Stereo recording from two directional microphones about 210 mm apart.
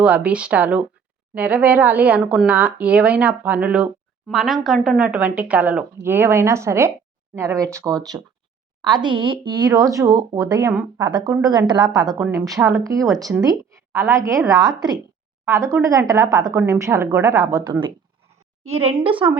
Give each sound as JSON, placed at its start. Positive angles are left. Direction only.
{"t": 0.0, "sound": "a woman's voice", "side_deg": -5}